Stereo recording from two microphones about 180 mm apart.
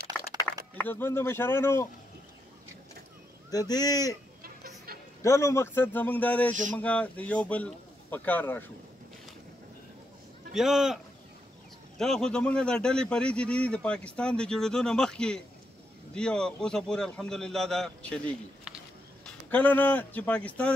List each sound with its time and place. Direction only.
0.7 s speech: 10° left (ahead or behind)
3.4 s speech: 20° left (ahead or behind)
5.2 s speech: 15° left (ahead or behind)
10.5 s a man's voice: centre (ahead or behind)
12.0 s a man's voice: 5° left (ahead or behind)